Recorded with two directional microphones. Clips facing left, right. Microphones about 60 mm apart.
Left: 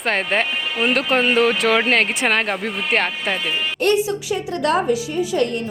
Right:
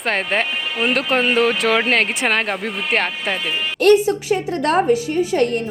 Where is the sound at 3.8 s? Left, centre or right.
Right.